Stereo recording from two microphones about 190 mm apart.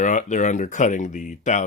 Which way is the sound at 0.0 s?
40° left (ahead or behind).